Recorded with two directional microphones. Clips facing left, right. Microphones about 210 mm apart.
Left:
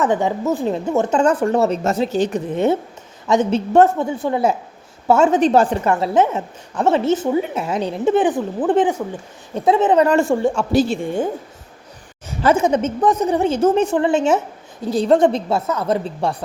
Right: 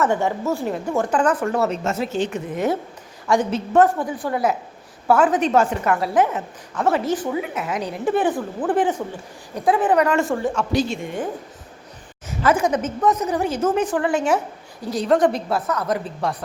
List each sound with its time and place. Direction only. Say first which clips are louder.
0.0 s a woman's voice: left 2 dB; 15° left (ahead or behind); by 2.4 s 40° left (ahead or behind)
3.2 s a woman's voice: left 3 dB; 25° left (ahead or behind)
12.4 s a woman's voice: left 3 dB; 25° left (ahead or behind)